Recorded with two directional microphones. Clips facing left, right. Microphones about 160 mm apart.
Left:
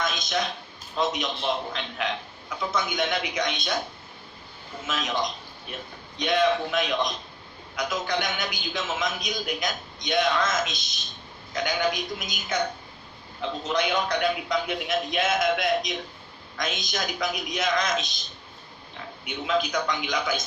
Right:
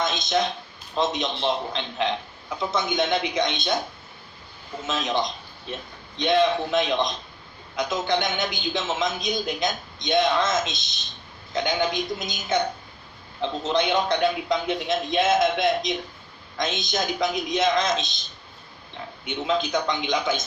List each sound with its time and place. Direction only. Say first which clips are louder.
0.0 s a sound: right 4 dB; 25° right (ahead or behind)
0.9 s a man's voice: right 2 dB; 25° right (ahead or behind)
4.9 s a man's voice: right 3 dB; 25° right (ahead or behind)
19.2 s a man's voice: right 1 dB; 25° right (ahead or behind)